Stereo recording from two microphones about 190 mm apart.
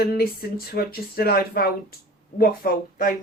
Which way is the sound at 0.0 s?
50° left (ahead or behind).